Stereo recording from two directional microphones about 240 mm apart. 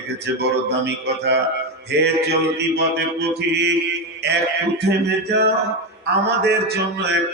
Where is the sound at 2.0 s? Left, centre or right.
Right.